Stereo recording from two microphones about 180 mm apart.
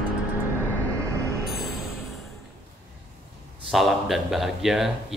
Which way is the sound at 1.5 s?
Centre (ahead or behind).